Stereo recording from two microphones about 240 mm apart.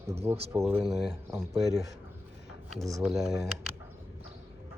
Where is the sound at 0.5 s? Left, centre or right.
Centre.